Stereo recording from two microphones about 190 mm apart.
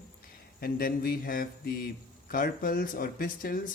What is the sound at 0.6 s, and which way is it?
Speech, 50° left (ahead or behind).